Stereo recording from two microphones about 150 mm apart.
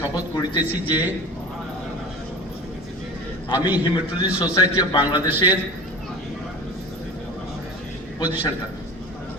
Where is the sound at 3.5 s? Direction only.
10° right (ahead or behind).